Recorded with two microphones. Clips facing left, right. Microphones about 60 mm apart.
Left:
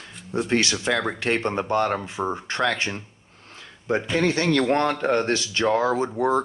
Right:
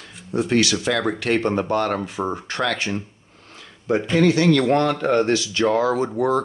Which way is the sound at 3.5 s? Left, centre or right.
Left.